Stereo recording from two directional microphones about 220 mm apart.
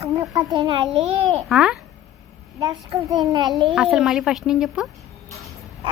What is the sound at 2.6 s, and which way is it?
Speech, 15° right (ahead or behind).